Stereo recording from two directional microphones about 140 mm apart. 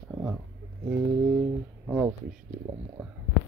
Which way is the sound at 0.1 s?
10° right (ahead or behind).